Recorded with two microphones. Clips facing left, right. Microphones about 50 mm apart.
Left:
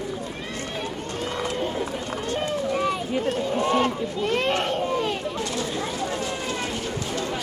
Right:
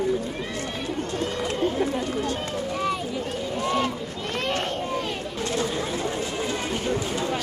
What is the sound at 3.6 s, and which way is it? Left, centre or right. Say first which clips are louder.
Run: left 2 dB; left.